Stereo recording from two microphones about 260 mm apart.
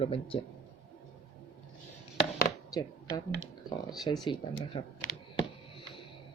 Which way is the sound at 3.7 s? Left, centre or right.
Centre.